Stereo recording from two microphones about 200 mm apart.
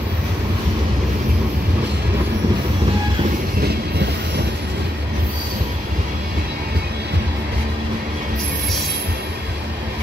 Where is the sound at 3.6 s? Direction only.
55° right (ahead or behind).